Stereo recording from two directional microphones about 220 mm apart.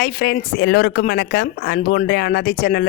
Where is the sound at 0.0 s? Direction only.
40° left (ahead or behind).